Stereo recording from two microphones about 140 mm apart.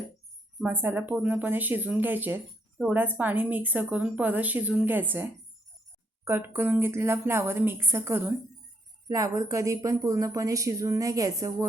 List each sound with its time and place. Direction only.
0.6 s speech: 15° right (ahead or behind)